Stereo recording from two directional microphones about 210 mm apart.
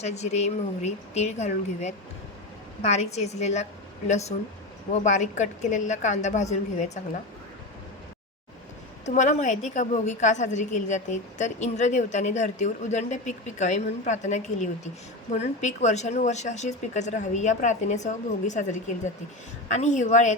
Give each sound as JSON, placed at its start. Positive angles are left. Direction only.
{"t": 0.0, "sound": "a woman's voice", "side_deg": 30}
{"t": 9.0, "sound": "a woman's voice", "side_deg": 35}